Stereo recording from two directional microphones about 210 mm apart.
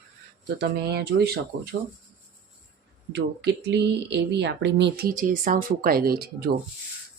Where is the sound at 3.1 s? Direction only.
55° right (ahead or behind).